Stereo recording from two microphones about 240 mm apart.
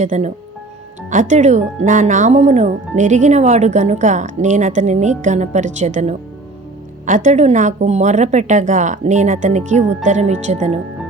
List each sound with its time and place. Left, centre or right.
0.0 s speech: right